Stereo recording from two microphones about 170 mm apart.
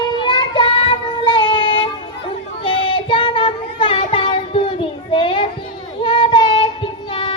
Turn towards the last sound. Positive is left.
turn(degrees=30)  # may be behind; listen again after turning